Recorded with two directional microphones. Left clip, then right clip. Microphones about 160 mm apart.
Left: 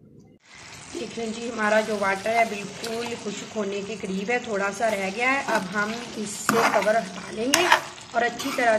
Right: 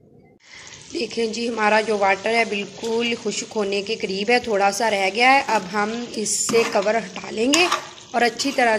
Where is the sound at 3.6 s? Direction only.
45° right (ahead or behind).